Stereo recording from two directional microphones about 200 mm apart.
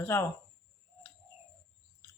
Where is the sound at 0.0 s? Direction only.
10° left (ahead or behind).